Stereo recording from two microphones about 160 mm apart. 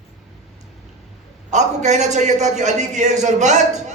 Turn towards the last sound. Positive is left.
turn(degrees=-45)  # may be behind; listen again after turning